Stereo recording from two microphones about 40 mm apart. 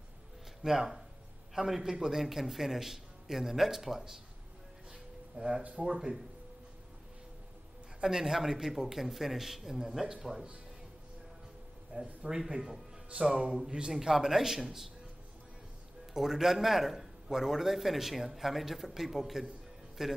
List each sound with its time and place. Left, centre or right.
0.6 s a man's voice: centre
5.6 s speech: right
5.9 s a man's voice: centre
8.0 s a man's voice: centre
11.9 s a man's voice: right
13.9 s a man's voice: centre
16.1 s a man's voice: centre